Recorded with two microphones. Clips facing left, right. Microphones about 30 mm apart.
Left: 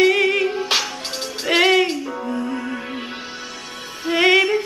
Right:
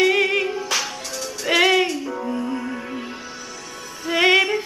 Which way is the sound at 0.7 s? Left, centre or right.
Left.